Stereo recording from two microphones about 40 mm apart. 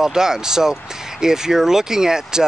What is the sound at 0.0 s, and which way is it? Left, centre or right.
Speech, centre.